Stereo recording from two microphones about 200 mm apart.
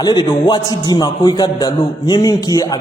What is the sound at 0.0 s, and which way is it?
A man's voice, 20° left (ahead or behind).